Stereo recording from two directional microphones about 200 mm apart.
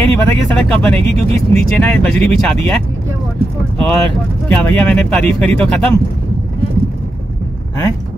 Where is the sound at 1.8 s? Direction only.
5° left (ahead or behind).